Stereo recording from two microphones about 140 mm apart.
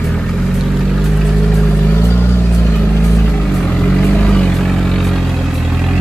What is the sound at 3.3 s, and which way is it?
Vehicle, 10° left (ahead or behind).